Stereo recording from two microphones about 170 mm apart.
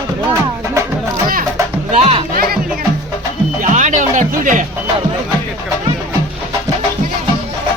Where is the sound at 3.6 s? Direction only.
45° right (ahead or behind).